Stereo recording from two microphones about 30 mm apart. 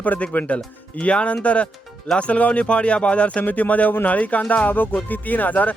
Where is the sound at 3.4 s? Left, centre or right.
Left.